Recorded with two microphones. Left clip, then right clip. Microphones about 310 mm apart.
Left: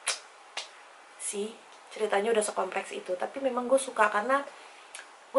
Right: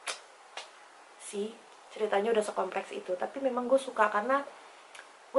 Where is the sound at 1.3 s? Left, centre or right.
Right.